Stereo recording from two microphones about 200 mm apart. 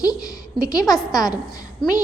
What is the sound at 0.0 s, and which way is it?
A woman's voice, 20° left (ahead or behind).